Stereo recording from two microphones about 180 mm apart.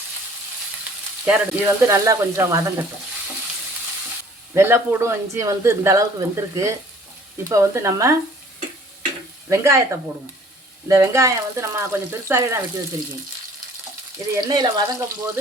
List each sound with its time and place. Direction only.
1.2 s speech: 10° right (ahead or behind)
4.5 s speech: 15° right (ahead or behind)
9.5 s speech: 15° right (ahead or behind)
10.8 s speech: 15° right (ahead or behind)
14.3 s speech: 25° right (ahead or behind)